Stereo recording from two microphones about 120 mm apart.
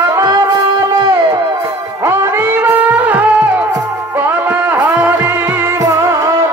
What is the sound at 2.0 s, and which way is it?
Music, 15° right (ahead or behind).